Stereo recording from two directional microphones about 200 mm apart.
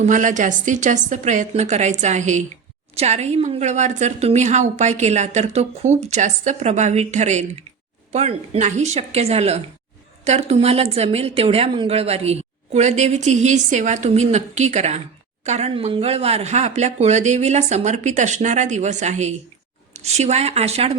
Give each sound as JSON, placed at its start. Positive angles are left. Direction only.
{"t": 0.0, "sound": "a woman's voice", "side_deg": -40}